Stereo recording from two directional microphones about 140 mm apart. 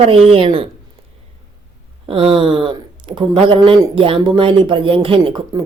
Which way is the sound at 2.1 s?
40° right (ahead or behind).